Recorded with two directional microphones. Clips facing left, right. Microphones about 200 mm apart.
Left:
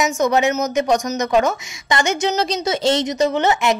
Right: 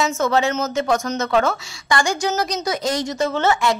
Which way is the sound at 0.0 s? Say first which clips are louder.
Left 2 dB; 20° left (ahead or behind).